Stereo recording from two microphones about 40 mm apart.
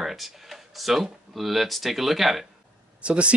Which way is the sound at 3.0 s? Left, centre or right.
Right.